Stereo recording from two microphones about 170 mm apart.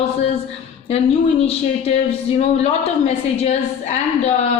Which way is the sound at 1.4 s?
35° left (ahead or behind).